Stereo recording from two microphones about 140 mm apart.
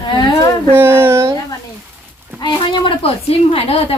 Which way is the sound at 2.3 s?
35° left (ahead or behind).